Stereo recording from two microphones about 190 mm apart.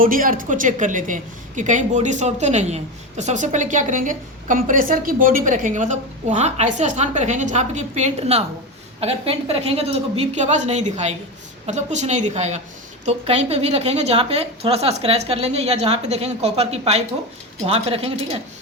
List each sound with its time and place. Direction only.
0.0 s a woman's voice: 45° right (ahead or behind); by 18.3 s 30° right (ahead or behind)